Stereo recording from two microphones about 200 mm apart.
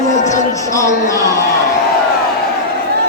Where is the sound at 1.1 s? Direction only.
15° left (ahead or behind).